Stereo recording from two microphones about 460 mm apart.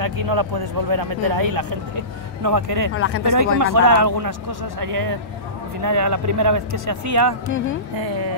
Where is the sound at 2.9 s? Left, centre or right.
Left.